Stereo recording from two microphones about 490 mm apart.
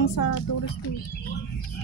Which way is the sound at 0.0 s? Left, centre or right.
Left.